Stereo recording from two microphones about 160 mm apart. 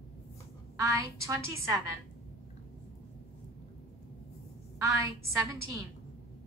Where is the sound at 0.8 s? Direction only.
20° right (ahead or behind).